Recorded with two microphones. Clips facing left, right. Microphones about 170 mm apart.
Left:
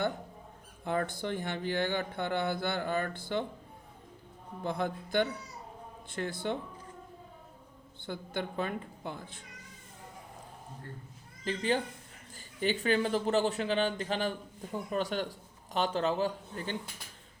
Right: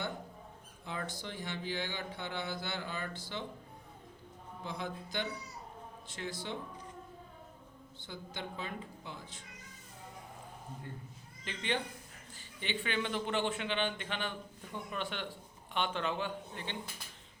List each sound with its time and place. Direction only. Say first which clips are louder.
0.9 s speech: left 9 dB; 55° left (ahead or behind)
4.6 s a woman's voice: left 7 dB; 55° left (ahead or behind)
8.0 s a woman's voice: left 7 dB; 55° left (ahead or behind)
11.4 s speech: left 6 dB; 35° left (ahead or behind)